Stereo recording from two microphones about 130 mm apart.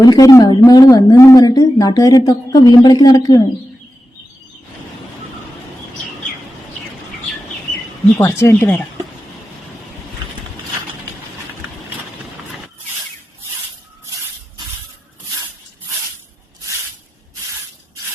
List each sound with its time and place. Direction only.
0.0 s a woman's voice: 30° left (ahead or behind)
8.2 s speech: 20° left (ahead or behind)
8.6 s speech: 5° left (ahead or behind)